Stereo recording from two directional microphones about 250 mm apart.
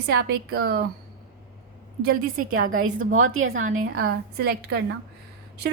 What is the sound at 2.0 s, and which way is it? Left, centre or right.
Speech, right.